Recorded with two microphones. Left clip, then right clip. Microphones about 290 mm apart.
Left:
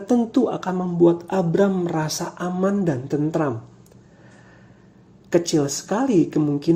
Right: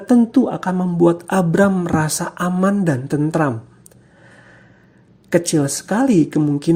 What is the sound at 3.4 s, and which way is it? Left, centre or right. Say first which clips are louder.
Speech: right 7 dB; right.